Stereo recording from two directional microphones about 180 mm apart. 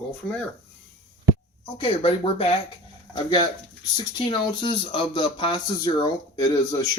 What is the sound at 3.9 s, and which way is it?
Speech, 25° left (ahead or behind).